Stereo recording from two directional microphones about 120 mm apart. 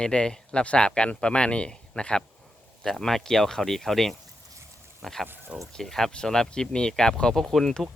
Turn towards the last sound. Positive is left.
turn(degrees=5)  # may be behind; listen again after turning